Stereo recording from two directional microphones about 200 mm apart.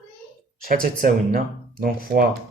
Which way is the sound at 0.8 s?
45° right (ahead or behind).